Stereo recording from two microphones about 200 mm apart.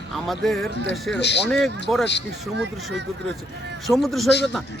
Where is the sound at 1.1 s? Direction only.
60° left (ahead or behind).